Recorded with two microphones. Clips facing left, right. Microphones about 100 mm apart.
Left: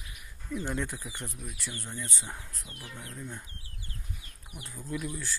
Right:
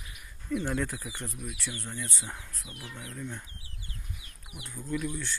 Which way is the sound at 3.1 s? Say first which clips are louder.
Right 3 dB; 10° left (ahead or behind).